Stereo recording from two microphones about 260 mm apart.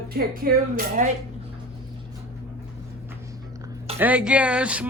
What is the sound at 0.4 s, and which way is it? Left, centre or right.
Speech, right.